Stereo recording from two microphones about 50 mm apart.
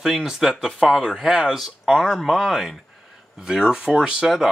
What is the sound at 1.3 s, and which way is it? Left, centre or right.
Speech, centre.